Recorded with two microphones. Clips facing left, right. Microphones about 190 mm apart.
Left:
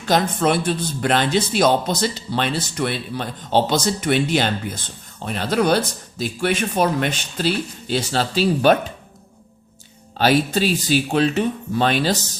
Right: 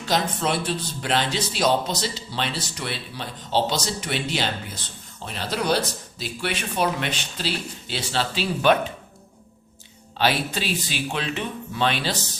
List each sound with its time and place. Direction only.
0.0 s a man's voice: 55° left (ahead or behind)
10.2 s a man's voice: 45° left (ahead or behind)